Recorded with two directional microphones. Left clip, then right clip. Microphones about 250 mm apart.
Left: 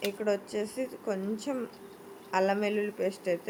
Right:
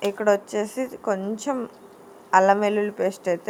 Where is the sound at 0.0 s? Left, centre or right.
Centre.